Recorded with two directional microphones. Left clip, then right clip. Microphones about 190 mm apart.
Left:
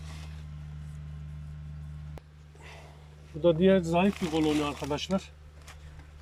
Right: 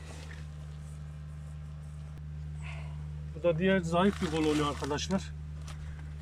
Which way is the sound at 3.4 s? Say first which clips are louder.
Left 5 dB; 20° left (ahead or behind).